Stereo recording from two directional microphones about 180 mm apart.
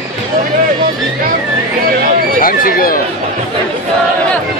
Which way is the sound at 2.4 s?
55° left (ahead or behind).